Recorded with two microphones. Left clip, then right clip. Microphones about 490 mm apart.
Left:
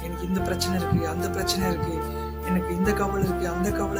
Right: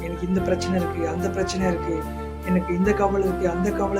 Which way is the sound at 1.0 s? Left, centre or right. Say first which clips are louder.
Right 2 dB; left.